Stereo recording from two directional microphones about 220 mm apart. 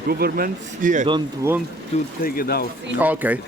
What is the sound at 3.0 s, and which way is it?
Speech, 5° right (ahead or behind).